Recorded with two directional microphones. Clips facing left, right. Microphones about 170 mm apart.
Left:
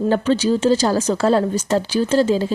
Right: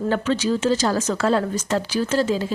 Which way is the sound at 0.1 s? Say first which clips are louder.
Left 3 dB; 30° left (ahead or behind).